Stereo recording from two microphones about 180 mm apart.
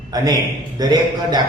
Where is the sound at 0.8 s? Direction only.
20° right (ahead or behind).